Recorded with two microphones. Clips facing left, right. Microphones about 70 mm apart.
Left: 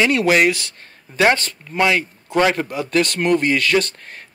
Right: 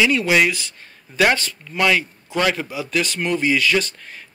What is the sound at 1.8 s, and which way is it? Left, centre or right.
Speech, left.